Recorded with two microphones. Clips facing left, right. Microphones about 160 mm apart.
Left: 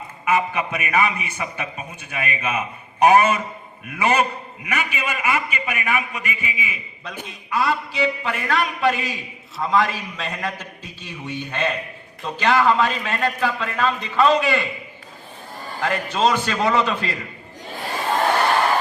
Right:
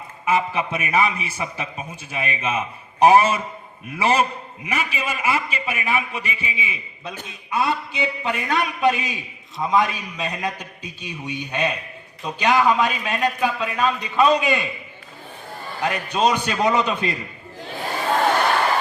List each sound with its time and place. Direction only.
0.3 s a man's voice: 30° right (ahead or behind)
15.8 s a man's voice: 15° right (ahead or behind)